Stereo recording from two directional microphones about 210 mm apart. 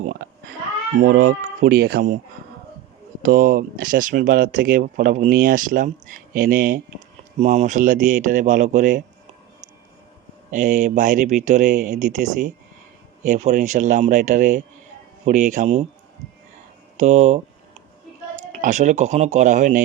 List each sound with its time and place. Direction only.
0.0 s cat: 45° right (ahead or behind)
1.0 s speech: 45° right (ahead or behind)
3.2 s speech: 45° right (ahead or behind)
10.5 s speech: 35° right (ahead or behind)
17.0 s speech: 35° right (ahead or behind)